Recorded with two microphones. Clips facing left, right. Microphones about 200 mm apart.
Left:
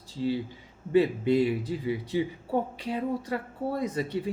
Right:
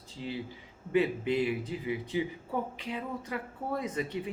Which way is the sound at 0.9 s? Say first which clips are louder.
Left 5 dB; 35° left (ahead or behind).